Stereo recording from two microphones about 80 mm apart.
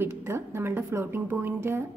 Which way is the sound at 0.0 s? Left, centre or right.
Right.